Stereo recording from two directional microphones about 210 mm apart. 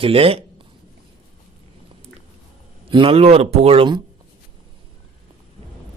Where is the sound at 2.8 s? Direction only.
25° right (ahead or behind).